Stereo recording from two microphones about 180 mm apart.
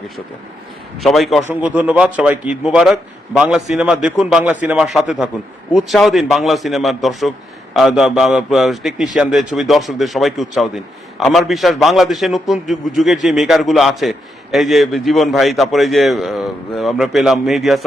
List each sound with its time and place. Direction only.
1.0 s a man's voice: centre (ahead or behind)